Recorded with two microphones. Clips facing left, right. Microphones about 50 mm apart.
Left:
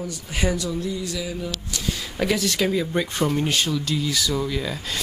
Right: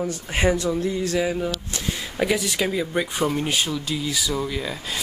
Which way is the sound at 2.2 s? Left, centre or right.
Centre.